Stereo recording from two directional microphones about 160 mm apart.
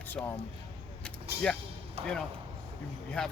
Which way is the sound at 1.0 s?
5° left (ahead or behind).